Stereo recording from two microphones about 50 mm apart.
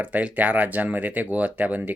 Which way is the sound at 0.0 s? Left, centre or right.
Right.